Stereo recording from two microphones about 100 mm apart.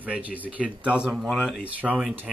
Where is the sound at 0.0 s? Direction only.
15° right (ahead or behind).